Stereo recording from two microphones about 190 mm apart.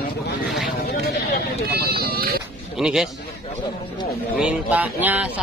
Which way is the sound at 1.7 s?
55° right (ahead or behind).